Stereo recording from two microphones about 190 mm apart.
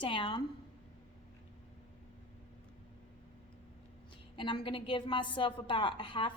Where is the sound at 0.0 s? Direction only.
25° left (ahead or behind).